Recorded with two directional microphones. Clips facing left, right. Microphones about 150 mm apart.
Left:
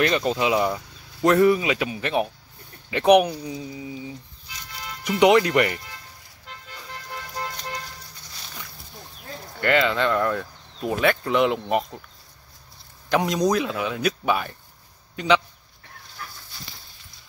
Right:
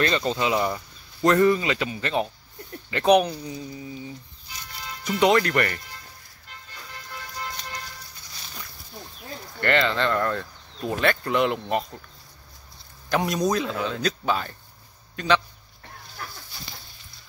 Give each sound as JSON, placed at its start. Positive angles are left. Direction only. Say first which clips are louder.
{"t": 0.0, "sound": "speech", "louder": "left 2 dB", "side_deg": 10}
{"t": 6.5, "sound": "music", "louder": "left 4 dB", "side_deg": 90}
{"t": 9.6, "sound": "speech", "louder": "left 2 dB", "side_deg": 10}
{"t": 13.1, "sound": "speech", "louder": "left 2 dB", "side_deg": 15}